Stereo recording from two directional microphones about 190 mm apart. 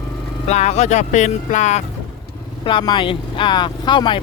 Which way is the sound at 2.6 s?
25° left (ahead or behind).